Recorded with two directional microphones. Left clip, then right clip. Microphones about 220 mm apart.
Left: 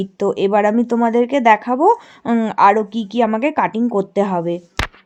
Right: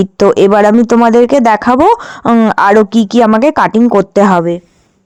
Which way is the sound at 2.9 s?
35° right (ahead or behind).